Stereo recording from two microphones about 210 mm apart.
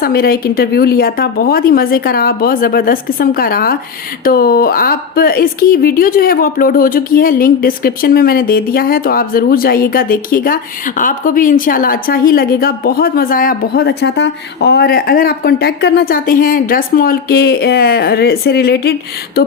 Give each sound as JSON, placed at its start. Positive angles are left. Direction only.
{"t": 0.0, "sound": "a woman's voice", "side_deg": 45}